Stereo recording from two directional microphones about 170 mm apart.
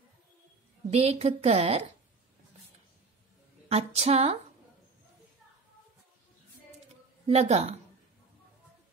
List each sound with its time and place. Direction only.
0.8 s a woman's voice: 40° right (ahead or behind)
3.6 s a woman's voice: 40° right (ahead or behind)
7.2 s a woman's voice: 40° right (ahead or behind)